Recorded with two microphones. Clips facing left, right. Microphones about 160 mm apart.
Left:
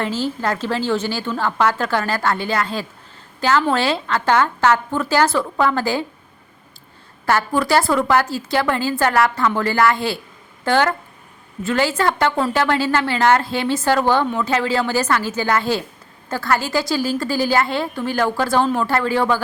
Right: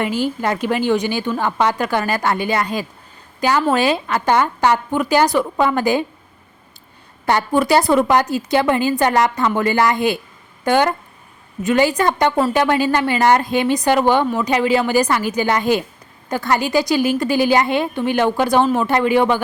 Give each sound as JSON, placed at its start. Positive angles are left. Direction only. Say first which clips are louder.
{"t": 0.0, "sound": "a woman's voice", "louder": "right 2 dB", "side_deg": -15}
{"t": 7.3, "sound": "a woman's voice", "louder": "right 2 dB", "side_deg": -20}